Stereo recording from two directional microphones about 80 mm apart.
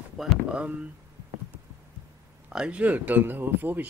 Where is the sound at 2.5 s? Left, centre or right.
Centre.